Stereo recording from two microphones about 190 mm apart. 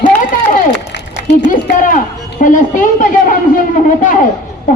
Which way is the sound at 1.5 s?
45° left (ahead or behind).